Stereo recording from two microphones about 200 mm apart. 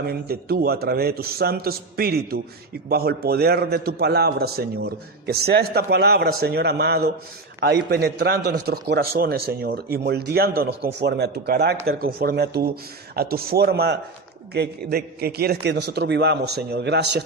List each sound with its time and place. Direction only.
0.0 s a man's voice: 50° right (ahead or behind)